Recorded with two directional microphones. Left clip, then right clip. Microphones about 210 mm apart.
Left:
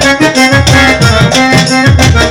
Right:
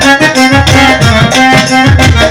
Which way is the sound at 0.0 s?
45° left (ahead or behind).